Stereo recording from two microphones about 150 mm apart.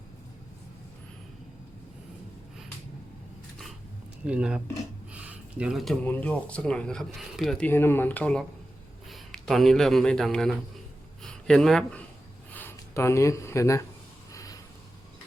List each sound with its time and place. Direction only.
4.3 s speech: 5° right (ahead or behind)
5.1 s a sound: 10° right (ahead or behind)
6.1 s a man's voice: 10° left (ahead or behind)
11.2 s a sound: 5° left (ahead or behind)
12.5 s speech: 15° left (ahead or behind)
14.3 s vehicle: 25° left (ahead or behind)